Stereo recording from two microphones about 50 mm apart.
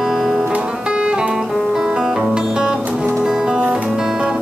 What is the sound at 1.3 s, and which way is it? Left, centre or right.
Music, centre.